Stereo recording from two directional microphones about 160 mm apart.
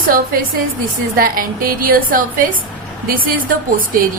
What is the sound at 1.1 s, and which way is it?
A woman's voice, 60° right (ahead or behind).